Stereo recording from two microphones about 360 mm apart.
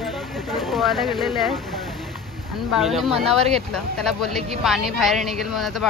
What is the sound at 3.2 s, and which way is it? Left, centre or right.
Speech, centre.